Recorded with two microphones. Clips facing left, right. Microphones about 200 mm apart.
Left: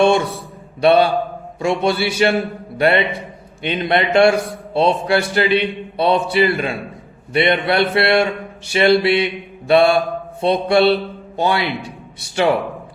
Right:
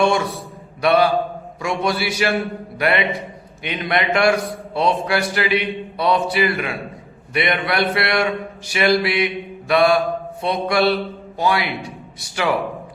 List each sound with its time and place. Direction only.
0.0 s a man's voice: 25° left (ahead or behind)